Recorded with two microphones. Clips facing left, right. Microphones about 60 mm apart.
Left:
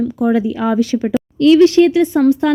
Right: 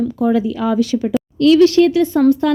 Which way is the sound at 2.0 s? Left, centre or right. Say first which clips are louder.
Left 1 dB; centre.